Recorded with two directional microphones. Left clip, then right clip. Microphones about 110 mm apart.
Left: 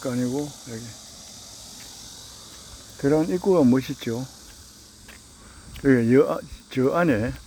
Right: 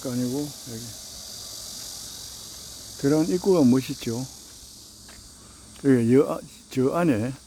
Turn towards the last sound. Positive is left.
turn(degrees=-10)  # may be behind; listen again after turning